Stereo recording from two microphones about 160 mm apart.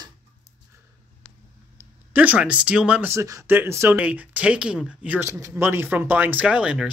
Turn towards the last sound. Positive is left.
turn(degrees=-5)  # may be behind; listen again after turning